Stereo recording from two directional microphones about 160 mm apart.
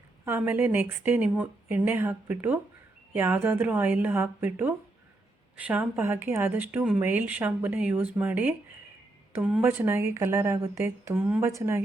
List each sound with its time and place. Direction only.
0.3 s speech: 10° right (ahead or behind)